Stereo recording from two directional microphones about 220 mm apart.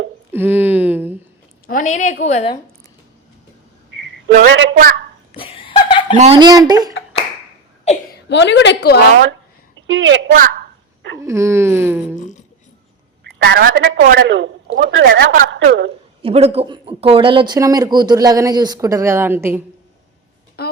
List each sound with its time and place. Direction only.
0.3 s a sound: 10° right (ahead or behind)
1.6 s a woman's voice: 35° left (ahead or behind)
4.4 s a man's voice: 55° right (ahead or behind)
5.3 s laughter: 25° left (ahead or behind)
6.1 s speech: 30° right (ahead or behind)
8.3 s a woman's voice: 55° left (ahead or behind)
9.7 s a woman's voice: 60° right (ahead or behind)
11.2 s speech: 15° right (ahead or behind)
13.4 s a man's voice: 40° right (ahead or behind)
14.0 s a woman's voice: 40° right (ahead or behind)
14.3 s a man's voice: 55° right (ahead or behind); by 15.4 s 40° right (ahead or behind)
15.5 s a woman's voice: 55° right (ahead or behind)
16.2 s speech: 25° right (ahead or behind); by 19.6 s 10° right (ahead or behind)
20.6 s a sound: 45° left (ahead or behind)